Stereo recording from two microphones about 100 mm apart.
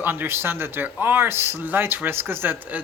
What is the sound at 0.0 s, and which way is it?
Speech, 20° right (ahead or behind).